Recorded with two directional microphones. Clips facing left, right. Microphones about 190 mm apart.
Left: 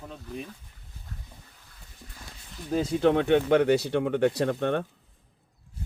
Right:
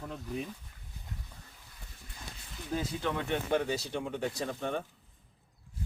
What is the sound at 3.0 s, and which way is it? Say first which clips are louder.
Speech: left 12 dB; 70° left (ahead or behind).